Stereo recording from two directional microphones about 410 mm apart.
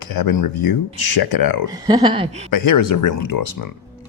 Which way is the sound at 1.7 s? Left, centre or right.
Centre.